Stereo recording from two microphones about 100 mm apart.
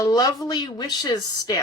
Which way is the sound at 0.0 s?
40° left (ahead or behind).